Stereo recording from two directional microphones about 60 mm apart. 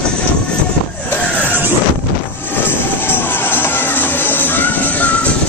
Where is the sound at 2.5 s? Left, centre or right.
Left.